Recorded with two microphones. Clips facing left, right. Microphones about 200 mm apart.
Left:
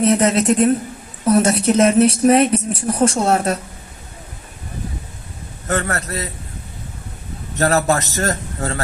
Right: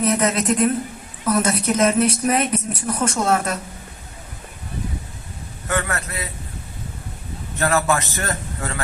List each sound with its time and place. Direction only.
0.0 s a woman's voice: 30° left (ahead or behind)
5.6 s speech: 35° left (ahead or behind)
7.6 s speech: 40° left (ahead or behind)